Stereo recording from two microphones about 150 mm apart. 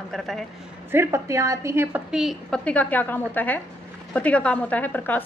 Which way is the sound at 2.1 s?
Centre (ahead or behind).